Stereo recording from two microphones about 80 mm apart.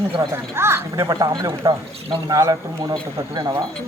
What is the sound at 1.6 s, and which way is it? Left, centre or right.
Speech, right.